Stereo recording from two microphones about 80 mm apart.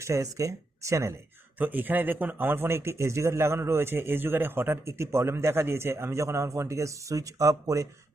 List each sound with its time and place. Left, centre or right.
0.0 s speech: right
1.5 s speech: right